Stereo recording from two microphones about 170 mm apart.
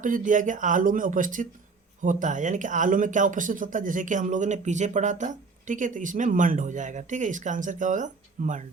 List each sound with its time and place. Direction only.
0.0 s speech: 50° right (ahead or behind)